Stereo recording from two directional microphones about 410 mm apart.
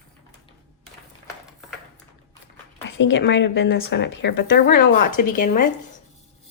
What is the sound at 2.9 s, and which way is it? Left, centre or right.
Speech, left.